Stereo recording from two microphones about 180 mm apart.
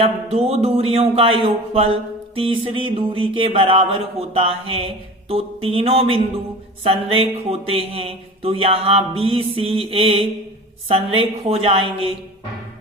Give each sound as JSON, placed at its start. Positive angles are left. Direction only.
{"t": 0.0, "sound": "speech", "side_deg": -35}